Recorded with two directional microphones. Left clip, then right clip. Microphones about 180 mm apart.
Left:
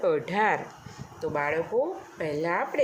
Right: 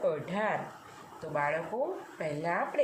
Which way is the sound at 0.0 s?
60° left (ahead or behind).